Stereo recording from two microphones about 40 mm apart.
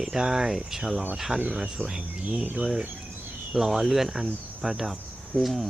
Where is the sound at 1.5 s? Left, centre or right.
Centre.